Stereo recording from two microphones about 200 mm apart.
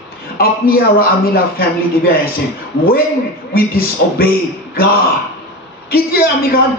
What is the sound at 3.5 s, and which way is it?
Speech, 50° left (ahead or behind).